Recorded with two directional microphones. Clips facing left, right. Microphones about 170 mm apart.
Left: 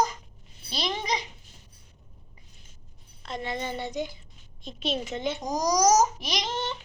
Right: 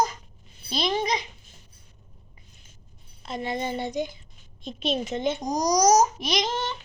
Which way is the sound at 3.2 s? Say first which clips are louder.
Right 3 dB; 5° right (ahead or behind).